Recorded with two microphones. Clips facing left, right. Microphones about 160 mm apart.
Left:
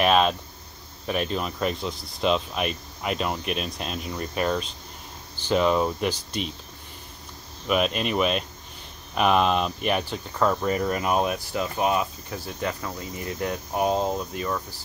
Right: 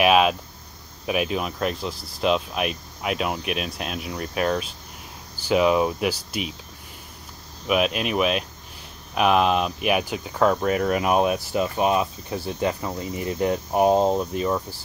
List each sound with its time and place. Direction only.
0.0 s speech: 5° right (ahead or behind)
7.6 s speech: 5° right (ahead or behind)
10.9 s cricket: 15° right (ahead or behind)